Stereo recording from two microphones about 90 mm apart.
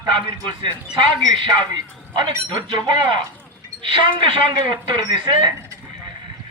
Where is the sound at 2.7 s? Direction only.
55° right (ahead or behind).